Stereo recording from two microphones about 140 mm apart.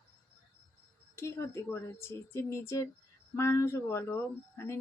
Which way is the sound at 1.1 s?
20° left (ahead or behind).